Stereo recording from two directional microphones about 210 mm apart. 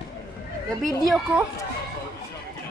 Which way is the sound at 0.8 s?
Centre (ahead or behind).